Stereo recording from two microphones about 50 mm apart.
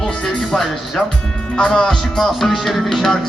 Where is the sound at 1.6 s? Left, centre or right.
Centre.